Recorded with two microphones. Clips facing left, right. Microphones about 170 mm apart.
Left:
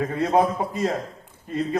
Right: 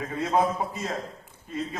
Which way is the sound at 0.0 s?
60° left (ahead or behind).